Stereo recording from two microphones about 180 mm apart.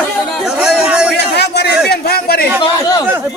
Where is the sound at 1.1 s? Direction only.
65° left (ahead or behind).